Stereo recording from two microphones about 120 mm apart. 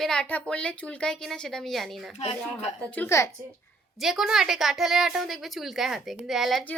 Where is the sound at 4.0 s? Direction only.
5° right (ahead or behind).